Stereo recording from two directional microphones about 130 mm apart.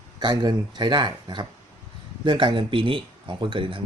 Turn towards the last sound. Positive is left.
turn(degrees=-40)  # may be behind; listen again after turning